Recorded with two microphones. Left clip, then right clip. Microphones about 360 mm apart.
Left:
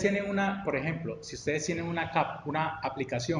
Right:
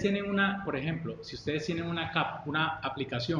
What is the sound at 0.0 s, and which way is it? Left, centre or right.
A man's voice, left.